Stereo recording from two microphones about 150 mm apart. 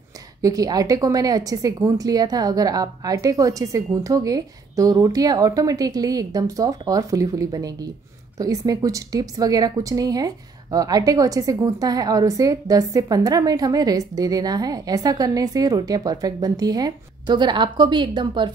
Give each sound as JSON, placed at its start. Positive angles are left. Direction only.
{"t": 0.4, "sound": "a woman's voice", "side_deg": -25}